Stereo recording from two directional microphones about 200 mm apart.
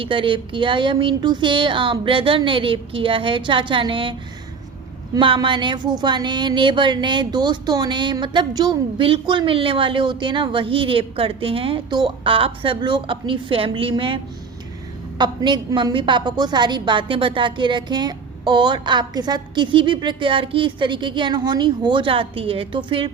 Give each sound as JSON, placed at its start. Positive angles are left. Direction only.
{"t": 0.0, "sound": "speech", "side_deg": -25}
{"t": 5.1, "sound": "speech", "side_deg": -25}
{"t": 15.2, "sound": "speech", "side_deg": -20}